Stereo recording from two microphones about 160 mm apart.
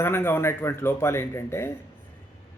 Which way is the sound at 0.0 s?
15° left (ahead or behind).